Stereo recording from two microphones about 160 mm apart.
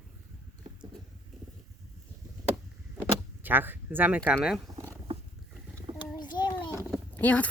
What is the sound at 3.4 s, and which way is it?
Speech, 10° right (ahead or behind).